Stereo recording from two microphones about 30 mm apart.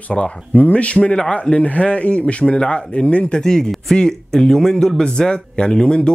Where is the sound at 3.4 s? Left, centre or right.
Left.